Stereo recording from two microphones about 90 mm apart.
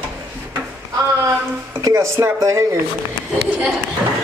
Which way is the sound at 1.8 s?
35° right (ahead or behind).